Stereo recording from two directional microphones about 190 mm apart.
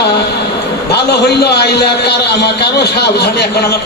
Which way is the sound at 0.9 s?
60° left (ahead or behind).